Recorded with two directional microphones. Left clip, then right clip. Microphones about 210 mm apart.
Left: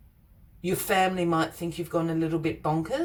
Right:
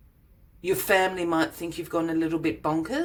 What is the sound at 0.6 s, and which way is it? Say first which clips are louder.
A woman's voice: right 2 dB; 30° right (ahead or behind).